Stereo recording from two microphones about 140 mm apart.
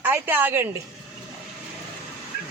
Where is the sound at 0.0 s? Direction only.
15° right (ahead or behind).